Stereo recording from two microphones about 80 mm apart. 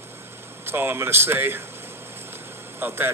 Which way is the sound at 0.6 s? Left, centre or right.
Right.